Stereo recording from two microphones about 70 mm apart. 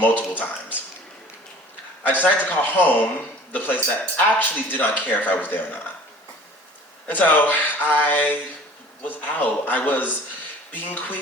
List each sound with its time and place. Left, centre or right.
0.0 s speech: left
2.0 s speech: left
7.1 s speech: left